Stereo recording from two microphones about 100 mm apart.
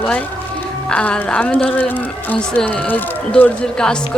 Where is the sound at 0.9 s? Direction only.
10° left (ahead or behind).